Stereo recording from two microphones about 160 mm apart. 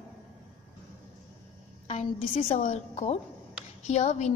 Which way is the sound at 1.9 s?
50° left (ahead or behind).